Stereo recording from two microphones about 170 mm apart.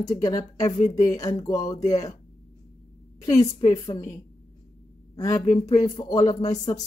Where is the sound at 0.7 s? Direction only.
45° left (ahead or behind).